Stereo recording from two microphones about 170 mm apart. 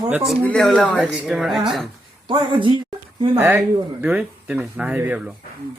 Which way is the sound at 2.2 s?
30° right (ahead or behind).